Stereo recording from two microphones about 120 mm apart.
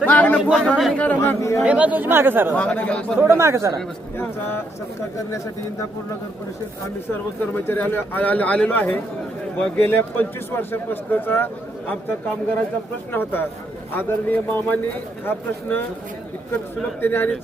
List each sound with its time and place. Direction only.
0.0 s a sound: 15° left (ahead or behind)
0.6 s speech: centre (ahead or behind)
0.9 s a man's voice: 15° left (ahead or behind)
1.4 s speech: 25° left (ahead or behind)
1.6 s speech: 10° right (ahead or behind)
2.6 s a man's voice: 10° left (ahead or behind)
3.2 s speech: 20° right (ahead or behind)
7.1 s a man's voice: 20° left (ahead or behind)
17.0 s a man's voice: 15° left (ahead or behind)